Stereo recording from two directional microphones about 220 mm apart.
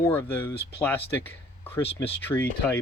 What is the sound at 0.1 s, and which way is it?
Speech, 10° left (ahead or behind).